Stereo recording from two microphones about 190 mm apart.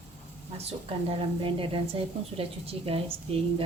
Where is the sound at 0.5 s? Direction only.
25° right (ahead or behind).